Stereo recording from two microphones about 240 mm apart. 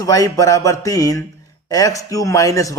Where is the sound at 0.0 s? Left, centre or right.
Centre.